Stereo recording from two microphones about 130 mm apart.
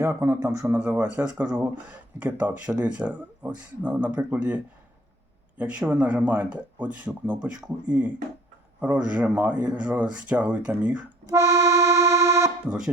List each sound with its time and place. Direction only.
0.0 s a man's voice: 20° right (ahead or behind)
0.8 s speech: 10° right (ahead or behind)
11.3 s accordion: 25° right (ahead or behind)
12.6 s speech: 5° right (ahead or behind)